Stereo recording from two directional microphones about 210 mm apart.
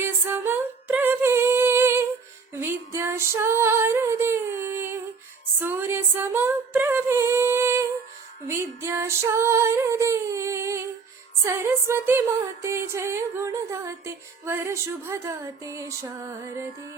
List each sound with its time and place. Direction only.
0.0 s singing: 10° right (ahead or behind)
2.5 s music: 10° right (ahead or behind)
5.5 s humming: 10° right (ahead or behind)
8.4 s female singing: 15° right (ahead or behind)
11.4 s a sound: 15° right (ahead or behind)
12.6 s music: 15° right (ahead or behind)